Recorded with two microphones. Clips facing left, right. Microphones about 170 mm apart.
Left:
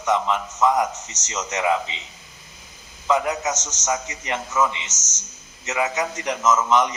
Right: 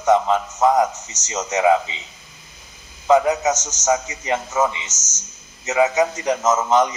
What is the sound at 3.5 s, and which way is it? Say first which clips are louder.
Speech: right 5 dB; 10° right (ahead or behind).